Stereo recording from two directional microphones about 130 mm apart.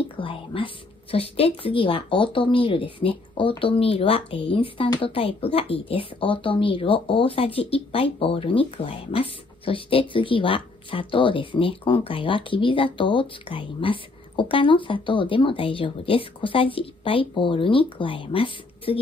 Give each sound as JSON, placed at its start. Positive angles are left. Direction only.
{"t": 0.1, "sound": "a woman's voice", "side_deg": 40}